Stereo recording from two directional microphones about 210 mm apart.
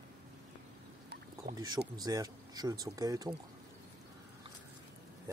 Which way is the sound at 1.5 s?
20° right (ahead or behind).